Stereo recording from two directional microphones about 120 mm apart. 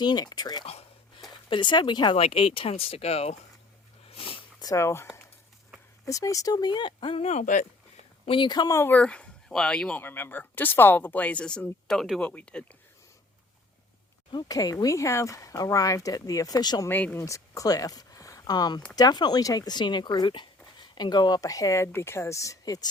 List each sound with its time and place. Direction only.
0.0 s speech: 35° left (ahead or behind)
0.6 s speech: 60° left (ahead or behind)
1.5 s speech: 40° left (ahead or behind)
2.1 s speech: 55° left (ahead or behind)
4.1 s a sound: 50° left (ahead or behind)
4.6 s speech: 25° left (ahead or behind)
6.1 s speech: 25° left (ahead or behind); by 7.7 s 85° left
8.3 s speech: 40° left (ahead or behind)
8.8 s speech: 10° left (ahead or behind)
12.2 s speech: 10° left (ahead or behind)
14.3 s speech: 35° left (ahead or behind)
16.9 s speech: 10° left (ahead or behind)
17.2 s speech: 25° left (ahead or behind)